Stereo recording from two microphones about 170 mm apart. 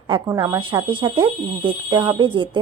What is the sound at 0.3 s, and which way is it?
A woman's voice, 20° right (ahead or behind).